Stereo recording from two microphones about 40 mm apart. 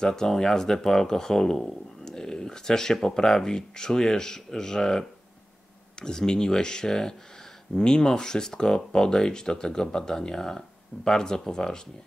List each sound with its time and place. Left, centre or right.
0.0 s speech: centre